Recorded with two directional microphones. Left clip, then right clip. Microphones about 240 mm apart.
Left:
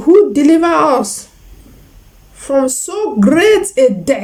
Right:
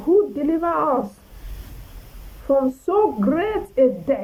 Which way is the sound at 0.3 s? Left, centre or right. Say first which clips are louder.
Left 11 dB; centre.